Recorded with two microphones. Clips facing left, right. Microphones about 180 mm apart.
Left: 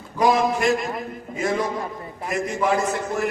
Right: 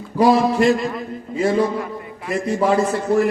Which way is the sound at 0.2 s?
30° right (ahead or behind).